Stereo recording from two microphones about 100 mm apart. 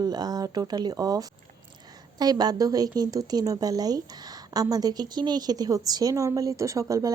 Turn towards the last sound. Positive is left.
turn(degrees=-35)  # may be behind; listen again after turning